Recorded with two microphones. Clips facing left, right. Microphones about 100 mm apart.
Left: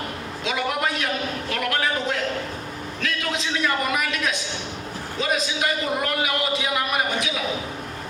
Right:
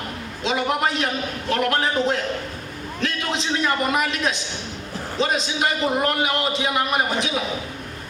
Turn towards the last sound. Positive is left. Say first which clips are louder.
# right 2 dB
turn(degrees=-30)  # may be behind; listen again after turning